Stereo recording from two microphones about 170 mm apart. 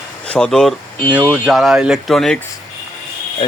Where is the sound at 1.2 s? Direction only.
10° right (ahead or behind).